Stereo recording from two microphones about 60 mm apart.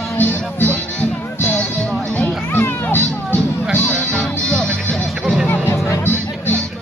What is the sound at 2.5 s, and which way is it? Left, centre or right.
Music, left.